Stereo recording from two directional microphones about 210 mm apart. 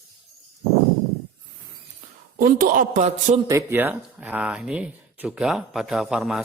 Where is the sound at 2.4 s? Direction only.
40° right (ahead or behind).